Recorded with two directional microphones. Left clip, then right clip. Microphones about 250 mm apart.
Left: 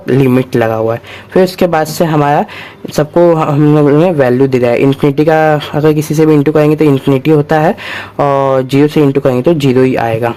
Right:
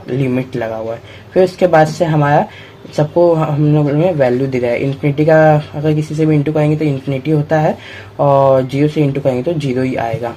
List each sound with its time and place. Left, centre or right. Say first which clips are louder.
0.2 s speech: left 7 dB; left